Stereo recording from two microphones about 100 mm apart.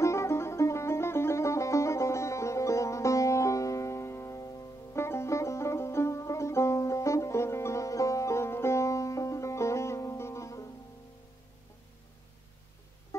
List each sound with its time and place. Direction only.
0.0 s music: 30° left (ahead or behind)